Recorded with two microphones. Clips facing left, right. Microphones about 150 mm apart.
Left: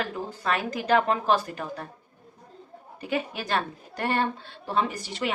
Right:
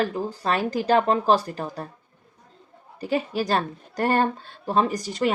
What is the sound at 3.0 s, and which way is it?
A woman's voice, 35° right (ahead or behind).